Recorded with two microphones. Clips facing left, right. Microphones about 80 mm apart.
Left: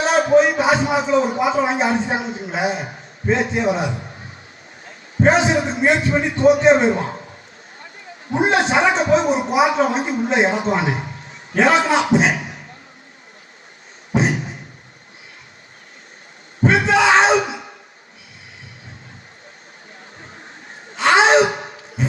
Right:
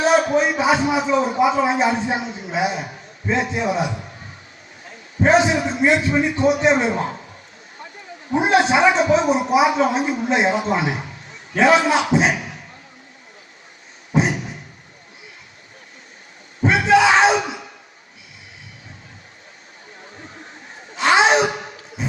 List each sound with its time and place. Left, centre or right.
0.0 s a woman's voice: left
5.2 s a woman's voice: left
8.4 s a woman's voice: left
14.1 s a sound: left
16.6 s a sound: left
20.9 s gasp: left